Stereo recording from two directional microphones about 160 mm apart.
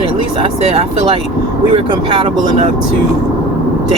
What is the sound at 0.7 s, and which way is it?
Speech, 40° right (ahead or behind).